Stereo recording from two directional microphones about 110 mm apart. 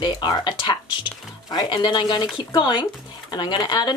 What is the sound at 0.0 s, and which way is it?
A woman's voice, 45° left (ahead or behind).